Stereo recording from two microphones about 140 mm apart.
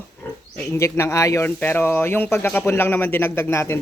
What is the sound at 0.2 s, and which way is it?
Pig, 15° left (ahead or behind).